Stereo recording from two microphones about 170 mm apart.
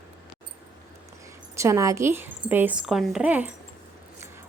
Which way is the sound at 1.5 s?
15° right (ahead or behind).